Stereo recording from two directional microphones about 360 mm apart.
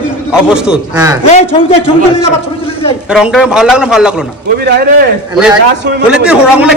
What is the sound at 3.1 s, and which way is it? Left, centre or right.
A man's voice, centre.